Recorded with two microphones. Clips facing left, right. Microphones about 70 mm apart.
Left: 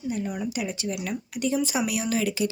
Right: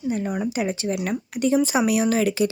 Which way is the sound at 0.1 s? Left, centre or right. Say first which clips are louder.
Right 5 dB; right.